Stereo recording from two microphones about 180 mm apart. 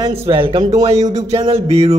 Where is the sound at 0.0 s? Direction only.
30° right (ahead or behind).